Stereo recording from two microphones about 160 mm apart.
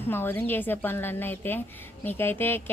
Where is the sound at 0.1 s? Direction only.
15° left (ahead or behind).